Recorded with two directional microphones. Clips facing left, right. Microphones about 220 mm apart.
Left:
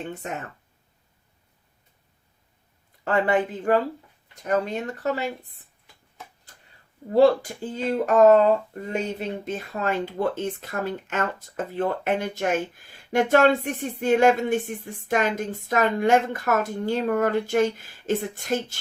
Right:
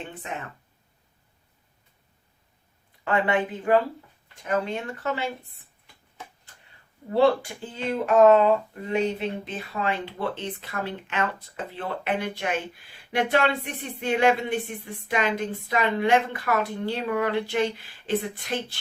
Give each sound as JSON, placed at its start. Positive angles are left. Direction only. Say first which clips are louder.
{"t": 3.0, "sound": "speech", "louder": "left 2 dB", "side_deg": 40}
{"t": 7.1, "sound": "speech", "louder": "left 3 dB", "side_deg": 40}